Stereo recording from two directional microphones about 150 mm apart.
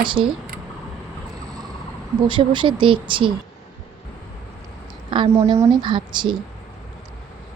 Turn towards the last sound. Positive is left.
turn(degrees=-30)  # may be behind; listen again after turning